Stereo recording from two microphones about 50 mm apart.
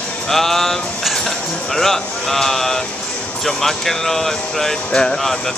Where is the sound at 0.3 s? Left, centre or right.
Centre.